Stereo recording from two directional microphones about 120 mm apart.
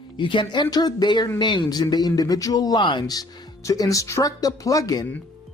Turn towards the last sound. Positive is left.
turn(degrees=30)  # may be behind; listen again after turning